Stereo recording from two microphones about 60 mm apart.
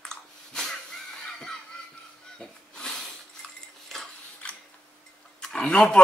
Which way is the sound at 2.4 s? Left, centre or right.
Centre.